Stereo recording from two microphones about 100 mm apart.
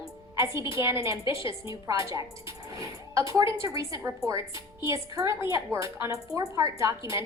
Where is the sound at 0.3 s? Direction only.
30° right (ahead or behind).